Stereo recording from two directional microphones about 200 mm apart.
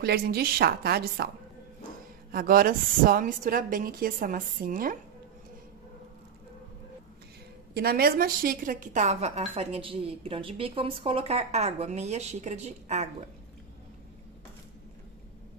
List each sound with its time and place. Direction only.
0.0 s a woman's voice: 50° right (ahead or behind)
2.3 s a woman's voice: 45° right (ahead or behind)
7.7 s a woman's voice: 50° right (ahead or behind); by 13.1 s 35° right (ahead or behind)